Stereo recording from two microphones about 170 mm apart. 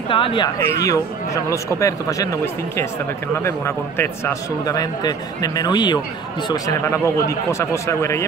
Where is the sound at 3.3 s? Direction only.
15° left (ahead or behind).